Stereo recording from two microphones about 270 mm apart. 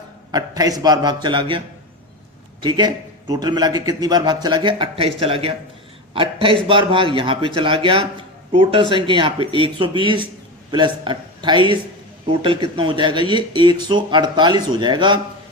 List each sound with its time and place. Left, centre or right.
0.3 s a man's voice: centre